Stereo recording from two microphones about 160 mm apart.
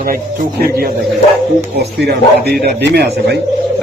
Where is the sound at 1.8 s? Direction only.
90° right.